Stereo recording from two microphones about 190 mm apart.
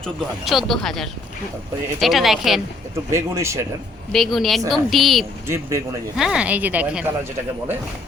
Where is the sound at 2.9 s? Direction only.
15° right (ahead or behind).